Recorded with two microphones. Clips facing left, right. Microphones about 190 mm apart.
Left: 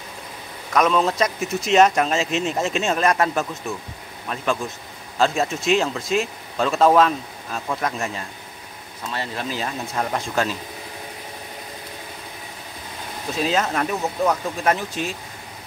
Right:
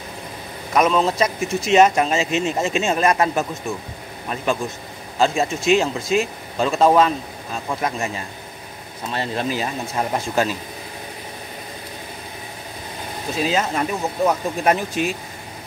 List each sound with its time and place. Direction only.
0.7 s speech: 5° right (ahead or behind)
9.0 s speech: 25° right (ahead or behind)
9.5 s speech: 10° right (ahead or behind)
13.3 s speech: centre (ahead or behind)
14.2 s speech: 15° right (ahead or behind)